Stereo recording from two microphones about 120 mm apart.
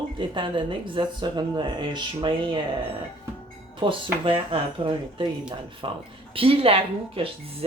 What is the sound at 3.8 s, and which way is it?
Speech, 45° right (ahead or behind).